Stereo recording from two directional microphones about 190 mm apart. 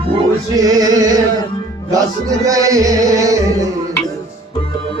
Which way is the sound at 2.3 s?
20° right (ahead or behind).